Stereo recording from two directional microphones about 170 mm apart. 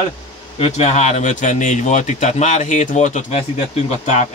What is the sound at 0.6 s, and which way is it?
Speech, 40° left (ahead or behind).